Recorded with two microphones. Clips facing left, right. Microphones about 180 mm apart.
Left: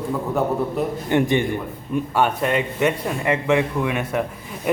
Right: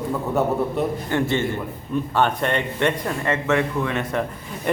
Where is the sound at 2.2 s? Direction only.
5° left (ahead or behind).